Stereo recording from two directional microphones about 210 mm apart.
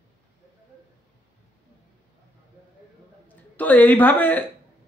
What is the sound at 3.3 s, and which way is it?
Speech, 10° left (ahead or behind).